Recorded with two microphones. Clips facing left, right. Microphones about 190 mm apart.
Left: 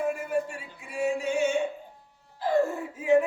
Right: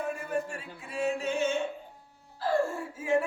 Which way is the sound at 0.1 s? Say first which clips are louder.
Left 3 dB; 10° left (ahead or behind).